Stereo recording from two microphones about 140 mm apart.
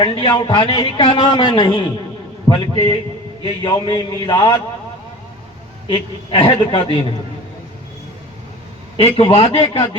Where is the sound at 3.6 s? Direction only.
35° left (ahead or behind).